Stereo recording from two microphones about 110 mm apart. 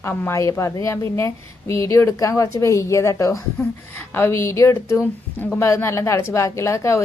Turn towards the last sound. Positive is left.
turn(degrees=25)  # may be behind; listen again after turning